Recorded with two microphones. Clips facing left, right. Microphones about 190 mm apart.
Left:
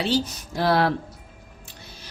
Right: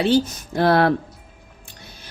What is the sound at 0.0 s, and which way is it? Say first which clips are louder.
Speech: right 6 dB; 50° right (ahead or behind).